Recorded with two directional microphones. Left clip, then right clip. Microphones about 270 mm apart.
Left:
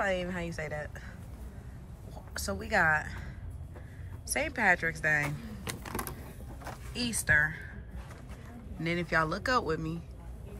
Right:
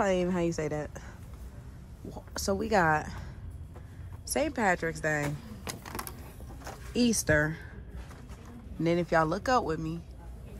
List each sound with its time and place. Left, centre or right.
0.0 s a woman's voice: right
2.1 s a woman's voice: right
4.3 s speech: centre
6.6 s speech: right
8.8 s speech: centre